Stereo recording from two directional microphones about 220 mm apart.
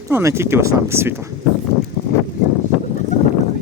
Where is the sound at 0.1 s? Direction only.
10° right (ahead or behind).